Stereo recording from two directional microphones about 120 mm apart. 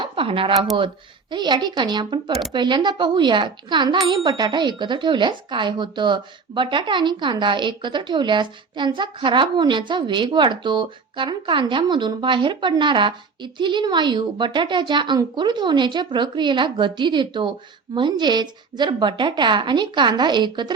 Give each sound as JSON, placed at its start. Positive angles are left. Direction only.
{"t": 0.0, "sound": "speech", "side_deg": -50}
{"t": 1.3, "sound": "speech", "side_deg": -40}